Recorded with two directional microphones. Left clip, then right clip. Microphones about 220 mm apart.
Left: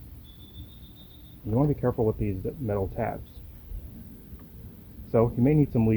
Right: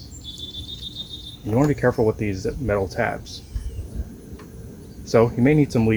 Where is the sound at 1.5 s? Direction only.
15° left (ahead or behind).